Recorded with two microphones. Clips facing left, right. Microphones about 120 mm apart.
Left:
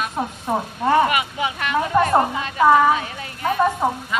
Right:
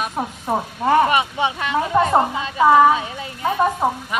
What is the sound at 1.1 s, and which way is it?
Speech, 30° right (ahead or behind).